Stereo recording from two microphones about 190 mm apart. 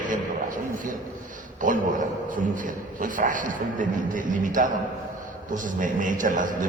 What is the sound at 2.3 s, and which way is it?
A man's voice, 45° right (ahead or behind).